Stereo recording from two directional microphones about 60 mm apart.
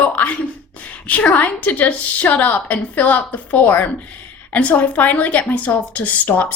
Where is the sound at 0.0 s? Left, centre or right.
Left.